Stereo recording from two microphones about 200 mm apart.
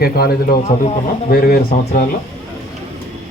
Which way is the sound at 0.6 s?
40° left (ahead or behind).